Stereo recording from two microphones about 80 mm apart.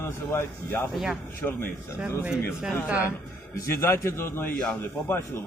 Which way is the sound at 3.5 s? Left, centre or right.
Left.